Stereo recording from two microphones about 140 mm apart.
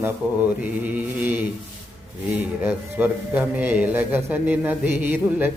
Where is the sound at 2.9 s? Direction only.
10° right (ahead or behind).